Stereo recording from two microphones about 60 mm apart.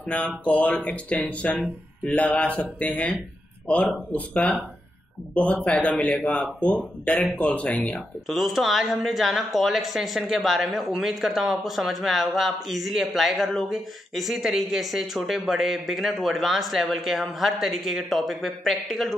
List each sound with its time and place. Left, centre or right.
0.5 s speech: left
8.3 s speech: centre